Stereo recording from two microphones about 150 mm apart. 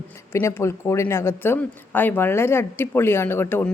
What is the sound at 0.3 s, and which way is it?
Speech, 15° left (ahead or behind).